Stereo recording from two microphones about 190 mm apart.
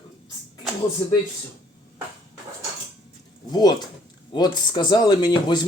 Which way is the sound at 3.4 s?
20° left (ahead or behind).